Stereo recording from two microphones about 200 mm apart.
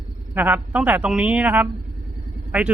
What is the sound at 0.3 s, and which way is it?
Speech, 10° right (ahead or behind).